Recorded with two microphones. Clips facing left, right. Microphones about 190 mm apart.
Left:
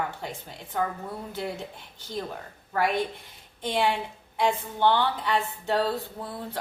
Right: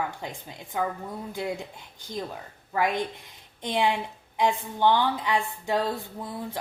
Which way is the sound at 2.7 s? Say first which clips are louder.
Even; 15° right (ahead or behind).